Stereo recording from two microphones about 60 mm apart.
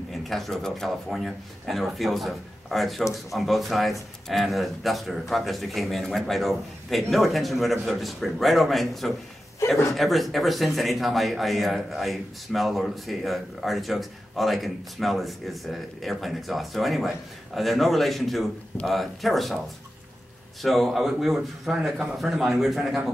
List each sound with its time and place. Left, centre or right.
0.1 s speech: centre
20.6 s speech: centre